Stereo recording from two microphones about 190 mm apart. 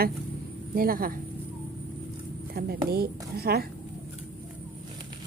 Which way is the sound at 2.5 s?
55° right (ahead or behind).